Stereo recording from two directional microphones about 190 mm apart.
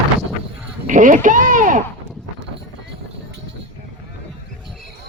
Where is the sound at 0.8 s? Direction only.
40° right (ahead or behind).